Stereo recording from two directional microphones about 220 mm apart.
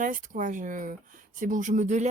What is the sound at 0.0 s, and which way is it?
Speech, 35° right (ahead or behind).